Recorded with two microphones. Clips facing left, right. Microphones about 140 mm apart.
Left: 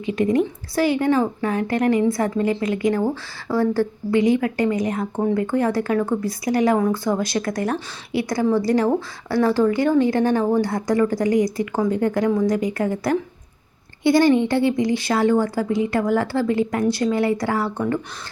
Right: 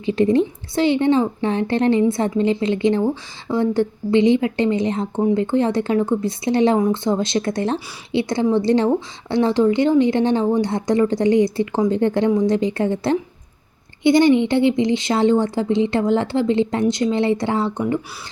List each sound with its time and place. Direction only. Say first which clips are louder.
0.0 s speech: right 3 dB; 30° right (ahead or behind)